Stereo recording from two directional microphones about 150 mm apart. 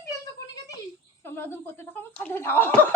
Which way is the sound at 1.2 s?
15° left (ahead or behind).